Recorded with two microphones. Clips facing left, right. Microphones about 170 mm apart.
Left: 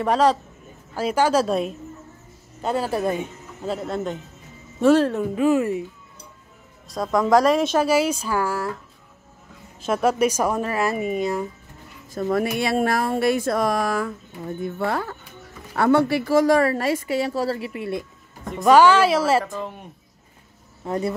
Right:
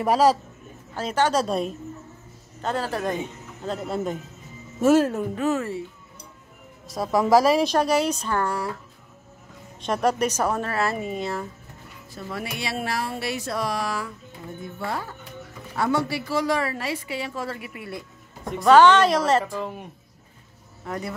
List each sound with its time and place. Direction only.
0.0 s a man's voice: 10° right (ahead or behind)
0.9 s speech: 10° left (ahead or behind)
3.6 s a woman's voice: centre (ahead or behind)
5.3 s speech: 10° left (ahead or behind)
6.9 s a woman's voice: 5° right (ahead or behind)
9.8 s speech: 5° left (ahead or behind)
12.1 s a woman's voice: 50° left (ahead or behind)
14.8 s a woman's voice: 65° left (ahead or behind); by 18.0 s 25° left (ahead or behind)
18.7 s speech: 10° left (ahead or behind)
20.8 s speech: 25° left (ahead or behind)